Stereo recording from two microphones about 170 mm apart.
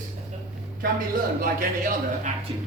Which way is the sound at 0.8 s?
60° right (ahead or behind).